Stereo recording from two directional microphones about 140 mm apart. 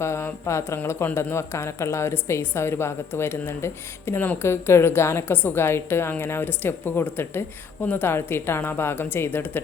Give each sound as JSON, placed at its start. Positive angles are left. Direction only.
{"t": 0.0, "sound": "speech", "side_deg": 20}